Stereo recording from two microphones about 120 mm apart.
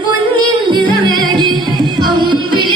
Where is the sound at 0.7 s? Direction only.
40° right (ahead or behind).